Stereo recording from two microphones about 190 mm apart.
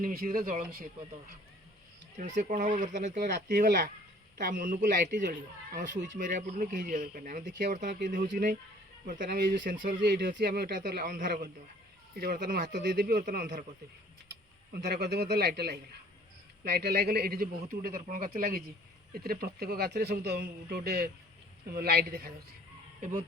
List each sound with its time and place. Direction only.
0.0 s a man's voice: 50° right (ahead or behind)
2.1 s speech: 40° right (ahead or behind)
4.4 s a man's voice: 45° right (ahead or behind)
5.9 s speech: 70° right (ahead or behind)
6.1 s a man's voice: 40° right (ahead or behind)
12.9 s a man's voice: 60° right (ahead or behind)
14.7 s a man's voice: 60° right (ahead or behind)
23.0 s speech: 45° right (ahead or behind)